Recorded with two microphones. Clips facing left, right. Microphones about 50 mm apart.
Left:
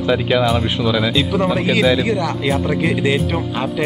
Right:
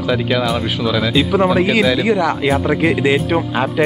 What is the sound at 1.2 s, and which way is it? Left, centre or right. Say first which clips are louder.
Speech: right 4 dB; centre.